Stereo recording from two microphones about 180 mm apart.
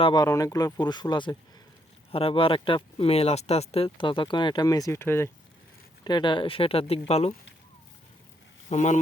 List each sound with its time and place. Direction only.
0.0 s speech: 25° left (ahead or behind)
6.1 s speech: 25° left (ahead or behind)
8.7 s speech: 40° left (ahead or behind)